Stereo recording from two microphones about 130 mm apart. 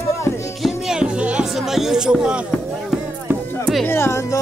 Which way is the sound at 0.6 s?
5° right (ahead or behind).